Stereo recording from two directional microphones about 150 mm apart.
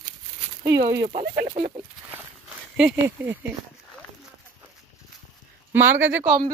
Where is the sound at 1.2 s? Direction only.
90° right.